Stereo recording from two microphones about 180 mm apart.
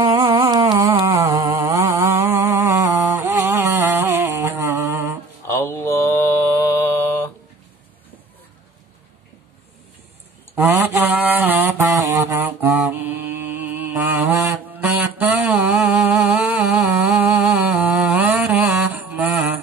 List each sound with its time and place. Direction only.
0.0 s a sound: 20° right (ahead or behind)
5.5 s mantra: 15° left (ahead or behind)
10.5 s mantra: 10° right (ahead or behind)